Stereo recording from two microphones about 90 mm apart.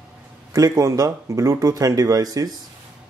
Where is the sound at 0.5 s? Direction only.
35° right (ahead or behind).